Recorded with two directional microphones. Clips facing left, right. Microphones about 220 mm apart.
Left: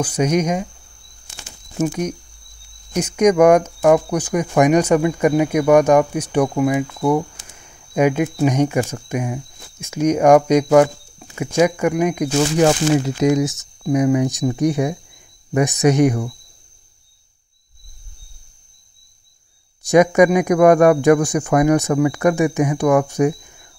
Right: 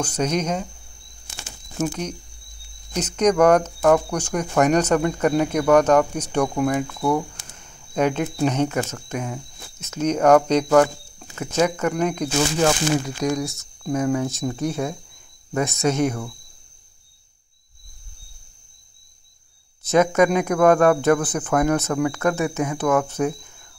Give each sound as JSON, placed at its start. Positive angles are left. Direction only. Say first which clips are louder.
{"t": 0.0, "sound": "speech", "louder": "left 5 dB", "side_deg": 10}
{"t": 1.8, "sound": "speech", "louder": "left 5 dB", "side_deg": 10}
{"t": 12.6, "sound": "speech", "louder": "left 5 dB", "side_deg": 25}
{"t": 19.8, "sound": "speech", "louder": "left 5 dB", "side_deg": 15}